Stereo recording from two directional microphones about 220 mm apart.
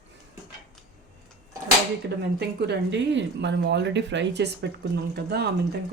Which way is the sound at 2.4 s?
50° right (ahead or behind).